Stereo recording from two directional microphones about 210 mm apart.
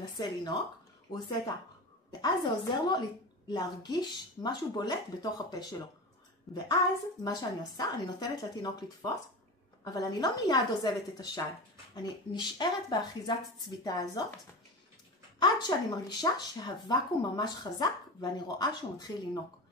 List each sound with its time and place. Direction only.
0.2 s speech: 20° left (ahead or behind)
2.2 s speech: 20° left (ahead or behind)
6.5 s a woman's voice: centre (ahead or behind)
7.2 s speech: 20° left (ahead or behind)
15.3 s speech: 20° left (ahead or behind)